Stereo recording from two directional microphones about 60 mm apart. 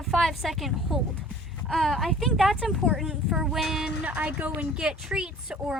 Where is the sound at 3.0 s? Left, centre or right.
Centre.